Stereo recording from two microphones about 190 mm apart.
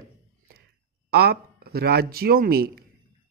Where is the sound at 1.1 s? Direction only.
55° right (ahead or behind).